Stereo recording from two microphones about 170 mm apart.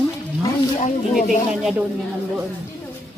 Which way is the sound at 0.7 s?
45° left (ahead or behind).